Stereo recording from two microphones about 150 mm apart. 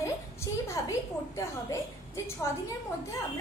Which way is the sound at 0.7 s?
20° left (ahead or behind).